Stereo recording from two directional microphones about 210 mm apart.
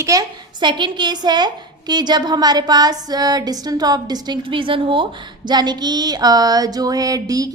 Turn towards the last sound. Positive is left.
turn(degrees=-15)  # may be behind; listen again after turning